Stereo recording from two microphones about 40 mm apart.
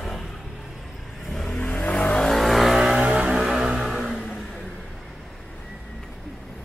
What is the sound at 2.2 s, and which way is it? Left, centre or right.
Vehicle, centre.